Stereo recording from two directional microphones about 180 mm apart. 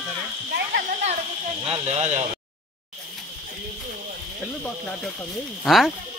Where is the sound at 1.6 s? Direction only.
35° right (ahead or behind).